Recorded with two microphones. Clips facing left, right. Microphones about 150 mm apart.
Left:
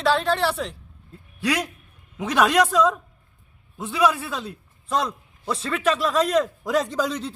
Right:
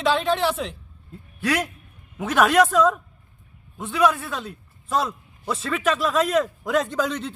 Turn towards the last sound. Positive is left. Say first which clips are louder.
# even
turn(degrees=0)  # may be behind; listen again after turning